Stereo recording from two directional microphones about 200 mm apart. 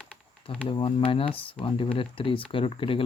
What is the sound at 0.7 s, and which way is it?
Speech, 25° left (ahead or behind).